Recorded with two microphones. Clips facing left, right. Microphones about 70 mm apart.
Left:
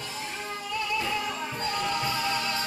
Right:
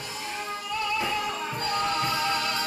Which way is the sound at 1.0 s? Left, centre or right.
Centre.